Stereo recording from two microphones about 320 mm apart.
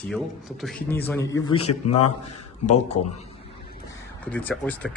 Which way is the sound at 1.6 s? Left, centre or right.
Centre.